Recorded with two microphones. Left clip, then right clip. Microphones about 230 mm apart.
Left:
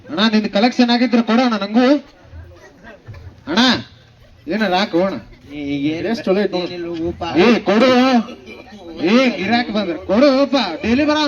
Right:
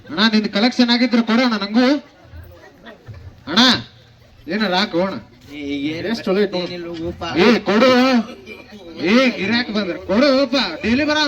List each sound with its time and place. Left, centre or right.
0.1 s speech: right
3.4 s speech: right